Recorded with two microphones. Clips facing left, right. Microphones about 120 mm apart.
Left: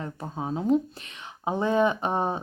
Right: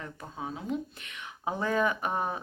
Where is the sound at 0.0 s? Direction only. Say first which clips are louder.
Left 6 dB; 30° left (ahead or behind).